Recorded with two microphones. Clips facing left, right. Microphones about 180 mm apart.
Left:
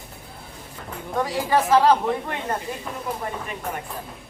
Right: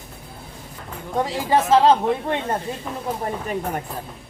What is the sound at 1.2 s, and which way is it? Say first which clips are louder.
A woman's voice: right 1 dB; 25° right (ahead or behind).